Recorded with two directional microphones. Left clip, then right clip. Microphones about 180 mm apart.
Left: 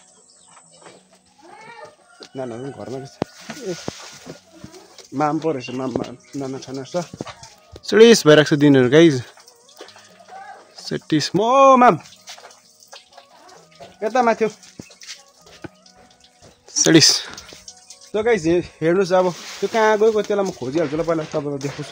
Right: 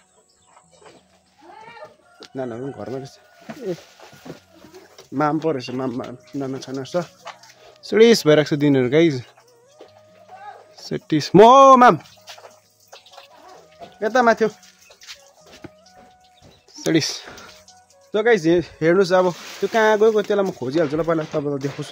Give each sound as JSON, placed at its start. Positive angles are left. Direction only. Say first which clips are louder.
{"t": 2.1, "sound": "speech", "louder": "right 1 dB", "side_deg": -25}
{"t": 5.1, "sound": "speech", "louder": "even", "side_deg": -20}
{"t": 7.8, "sound": "speech", "louder": "left 3 dB", "side_deg": 5}
{"t": 10.8, "sound": "speech", "louder": "left 2 dB", "side_deg": -5}
{"t": 11.5, "sound": "speech", "louder": "left 4 dB", "side_deg": -20}
{"t": 13.9, "sound": "speech", "louder": "right 1 dB", "side_deg": -20}
{"t": 15.6, "sound": "a sound", "louder": "left 5 dB", "side_deg": 10}
{"t": 16.7, "sound": "speech", "louder": "left 8 dB", "side_deg": 15}
{"t": 18.1, "sound": "speech", "louder": "right 1 dB", "side_deg": -30}